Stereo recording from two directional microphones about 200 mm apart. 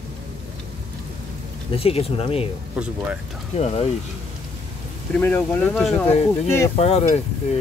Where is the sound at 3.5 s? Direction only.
30° left (ahead or behind).